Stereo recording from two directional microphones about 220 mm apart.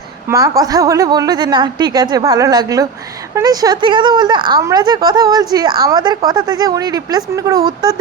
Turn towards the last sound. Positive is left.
turn(degrees=-20)  # may be behind; listen again after turning